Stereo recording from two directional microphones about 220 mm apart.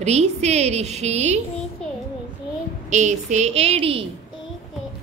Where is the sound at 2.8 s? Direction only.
30° right (ahead or behind).